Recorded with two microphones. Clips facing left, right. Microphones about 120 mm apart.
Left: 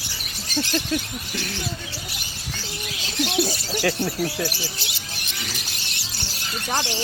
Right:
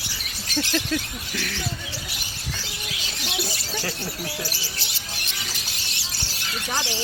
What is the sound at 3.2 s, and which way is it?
Bird, 50° left (ahead or behind).